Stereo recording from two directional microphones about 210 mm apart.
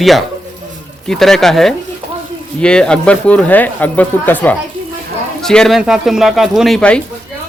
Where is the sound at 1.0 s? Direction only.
Centre (ahead or behind).